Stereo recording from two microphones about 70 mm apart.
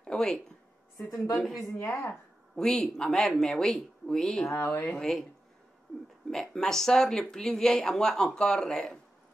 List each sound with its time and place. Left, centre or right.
0.0 s a sound: centre
0.9 s a woman's voice: left
1.3 s a woman's voice: centre
1.8 s speech: left
2.5 s speech: centre
4.6 s speech: left
4.9 s speech: centre
6.3 s speech: centre